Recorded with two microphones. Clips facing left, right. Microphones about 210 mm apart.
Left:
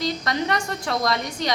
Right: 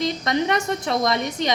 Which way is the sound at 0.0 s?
20° right (ahead or behind).